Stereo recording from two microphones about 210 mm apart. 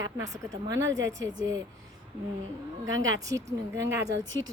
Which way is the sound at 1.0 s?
60° right (ahead or behind).